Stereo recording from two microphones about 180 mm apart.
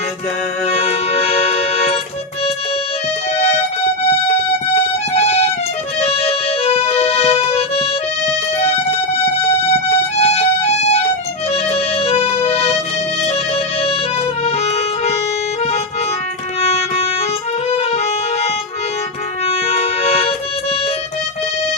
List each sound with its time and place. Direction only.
0.7 s music: 35° left (ahead or behind)
5.1 s music: 35° left (ahead or behind)
6.0 s accordion: 35° left (ahead or behind)
10.2 s music: 35° left (ahead or behind)
14.4 s accordion: 35° left (ahead or behind)
17.7 s accordion: 35° left (ahead or behind)
19.5 s music: 35° left (ahead or behind)